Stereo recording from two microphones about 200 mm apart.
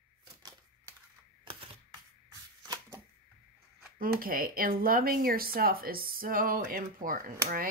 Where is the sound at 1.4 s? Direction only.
25° right (ahead or behind).